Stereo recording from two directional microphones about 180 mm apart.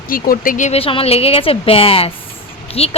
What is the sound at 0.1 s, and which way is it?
Speech, 50° left (ahead or behind).